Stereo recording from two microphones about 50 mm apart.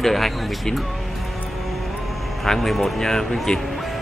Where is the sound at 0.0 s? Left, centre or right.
Centre.